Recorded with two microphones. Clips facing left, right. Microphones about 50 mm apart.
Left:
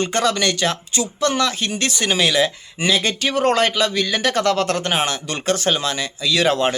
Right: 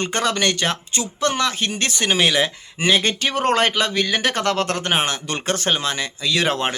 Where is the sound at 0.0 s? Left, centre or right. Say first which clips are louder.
Left 2 dB; right.